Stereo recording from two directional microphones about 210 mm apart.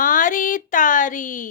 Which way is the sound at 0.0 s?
40° left (ahead or behind).